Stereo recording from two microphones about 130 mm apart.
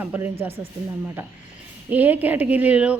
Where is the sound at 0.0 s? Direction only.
15° right (ahead or behind).